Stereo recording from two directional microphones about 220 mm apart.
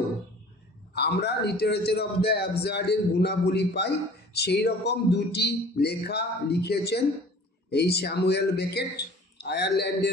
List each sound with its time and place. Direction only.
0.9 s a man's voice: 50° left (ahead or behind)